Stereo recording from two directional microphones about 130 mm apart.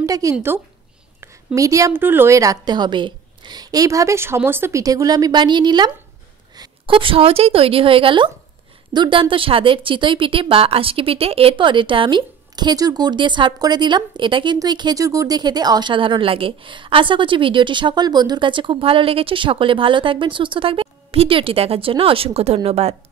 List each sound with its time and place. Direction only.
0.0 s a woman's voice: 25° right (ahead or behind); by 22.9 s 50° right (ahead or behind)